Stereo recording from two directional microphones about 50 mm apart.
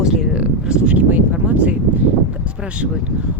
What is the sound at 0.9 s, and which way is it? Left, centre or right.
Speech, right.